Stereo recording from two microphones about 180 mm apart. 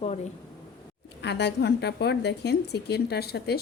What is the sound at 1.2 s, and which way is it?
A woman's voice, 70° left (ahead or behind).